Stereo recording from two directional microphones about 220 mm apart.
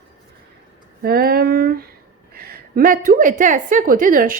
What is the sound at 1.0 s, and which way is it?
A woman's voice, 45° right (ahead or behind).